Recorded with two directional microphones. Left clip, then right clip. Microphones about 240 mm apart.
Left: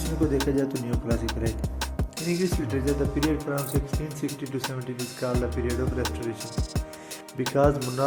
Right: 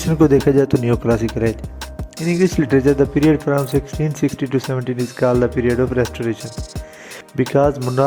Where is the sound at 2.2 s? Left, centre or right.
Right.